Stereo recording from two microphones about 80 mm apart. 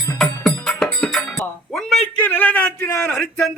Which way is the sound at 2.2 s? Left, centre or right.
Left.